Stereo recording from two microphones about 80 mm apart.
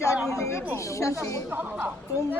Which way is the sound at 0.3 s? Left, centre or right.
Left.